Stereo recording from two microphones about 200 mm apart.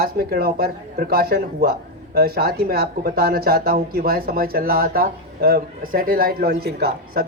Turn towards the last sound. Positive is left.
turn(degrees=-50)  # may be behind; listen again after turning